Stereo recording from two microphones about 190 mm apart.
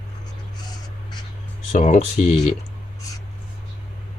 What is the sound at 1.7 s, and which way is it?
Speech, 40° left (ahead or behind).